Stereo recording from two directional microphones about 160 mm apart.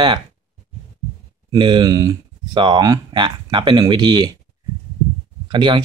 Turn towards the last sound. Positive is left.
turn(degrees=-30)  # may be behind; listen again after turning